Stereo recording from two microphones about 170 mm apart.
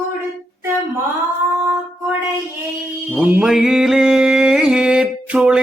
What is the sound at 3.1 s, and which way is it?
Mantra, 10° right (ahead or behind).